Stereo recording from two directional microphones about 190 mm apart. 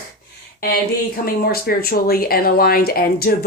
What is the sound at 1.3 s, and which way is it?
Speech, 50° left (ahead or behind).